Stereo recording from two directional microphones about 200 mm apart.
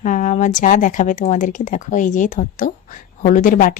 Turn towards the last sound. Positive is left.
turn(degrees=40)  # may be behind; listen again after turning